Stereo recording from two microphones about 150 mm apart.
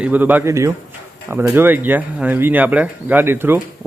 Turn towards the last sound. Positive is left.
turn(degrees=-15)  # may be behind; listen again after turning